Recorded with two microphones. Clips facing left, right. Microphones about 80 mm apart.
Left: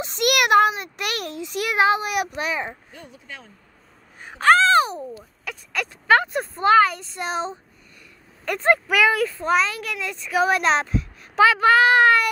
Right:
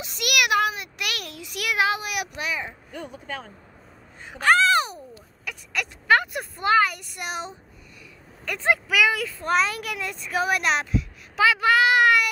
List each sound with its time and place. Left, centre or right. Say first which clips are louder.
0.0 s a sound: left 5 dB; left
0.7 s speech: left 4 dB; left
4.4 s a sound: left 4 dB; left
5.5 s speech: left 2 dB; left
8.6 s speech: left 3 dB; left
9.6 s a child's voice: left 1 dB; centre
10.4 s a child's voice: left 4 dB; left